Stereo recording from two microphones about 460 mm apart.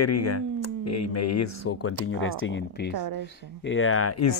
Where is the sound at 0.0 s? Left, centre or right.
Left.